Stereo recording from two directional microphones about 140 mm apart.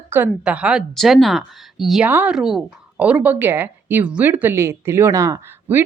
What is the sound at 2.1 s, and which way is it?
Speech, 15° right (ahead or behind).